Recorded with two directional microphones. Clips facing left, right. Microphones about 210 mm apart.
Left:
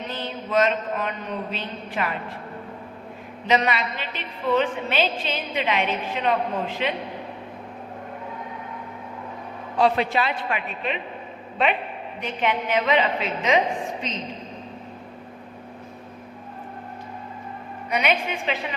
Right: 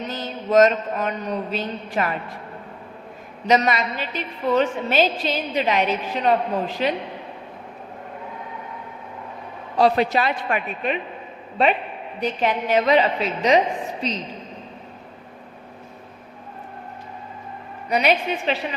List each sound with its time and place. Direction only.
0.1 s a man's voice: 40° right (ahead or behind)
3.4 s a woman's voice: 40° right (ahead or behind)
9.7 s a woman's voice: 40° right (ahead or behind)
12.2 s a woman's voice: 40° right (ahead or behind)
17.8 s a woman's voice: 35° right (ahead or behind)